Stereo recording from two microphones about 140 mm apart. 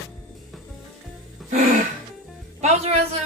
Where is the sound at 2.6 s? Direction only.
50° right (ahead or behind).